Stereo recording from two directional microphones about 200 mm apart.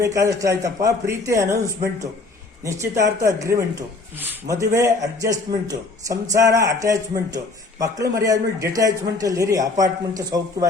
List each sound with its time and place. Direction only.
0.0 s speech: 15° right (ahead or behind)